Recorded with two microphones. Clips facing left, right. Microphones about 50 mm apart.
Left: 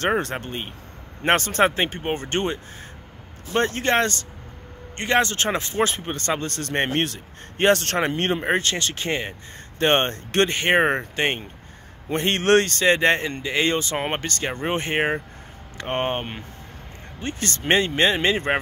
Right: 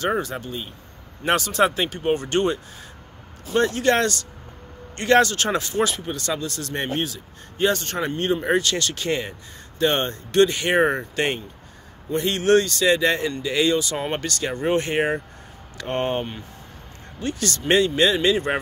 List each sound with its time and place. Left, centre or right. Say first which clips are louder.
0.0 s speech: left 1 dB; left
8.5 s speech: right 1 dB; left
9.8 s speech: left 2 dB; left
12.1 s speech: even; left